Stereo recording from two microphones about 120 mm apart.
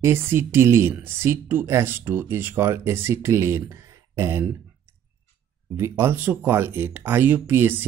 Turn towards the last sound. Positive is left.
turn(degrees=-15)  # may be behind; listen again after turning